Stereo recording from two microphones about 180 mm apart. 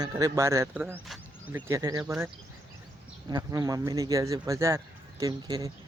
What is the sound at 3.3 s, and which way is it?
Speech, 20° right (ahead or behind).